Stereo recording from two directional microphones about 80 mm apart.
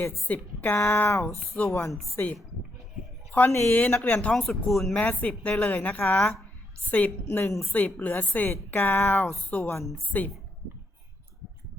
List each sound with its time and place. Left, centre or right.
0.3 s a woman's voice: left
3.5 s speech: left
3.8 s a woman's voice: centre
4.4 s speech: centre
4.9 s speech: centre
6.1 s a woman's voice: centre